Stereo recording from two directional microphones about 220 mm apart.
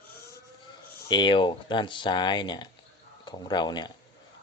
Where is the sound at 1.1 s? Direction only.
20° left (ahead or behind).